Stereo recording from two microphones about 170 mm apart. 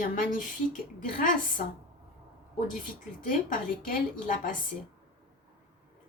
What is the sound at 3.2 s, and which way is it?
A woman's voice, 55° left (ahead or behind).